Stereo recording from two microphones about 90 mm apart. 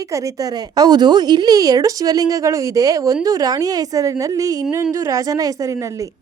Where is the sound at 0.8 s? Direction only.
50° right (ahead or behind).